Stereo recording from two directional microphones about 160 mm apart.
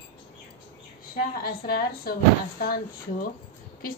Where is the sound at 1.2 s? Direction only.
65° left (ahead or behind).